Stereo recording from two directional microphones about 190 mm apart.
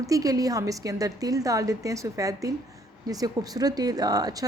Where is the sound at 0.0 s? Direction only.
20° right (ahead or behind).